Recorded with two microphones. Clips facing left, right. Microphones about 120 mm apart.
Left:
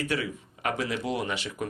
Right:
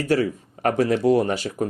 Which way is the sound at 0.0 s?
40° right (ahead or behind).